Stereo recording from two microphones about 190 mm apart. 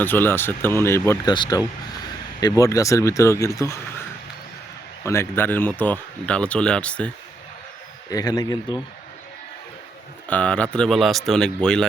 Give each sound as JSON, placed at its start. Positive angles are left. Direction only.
{"t": 0.0, "sound": "speech", "side_deg": 10}
{"t": 5.0, "sound": "speech", "side_deg": 15}
{"t": 8.1, "sound": "speech", "side_deg": 20}
{"t": 10.2, "sound": "speech", "side_deg": 5}